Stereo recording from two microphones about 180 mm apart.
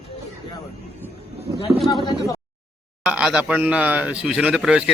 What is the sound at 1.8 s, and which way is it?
Speech, 25° left (ahead or behind).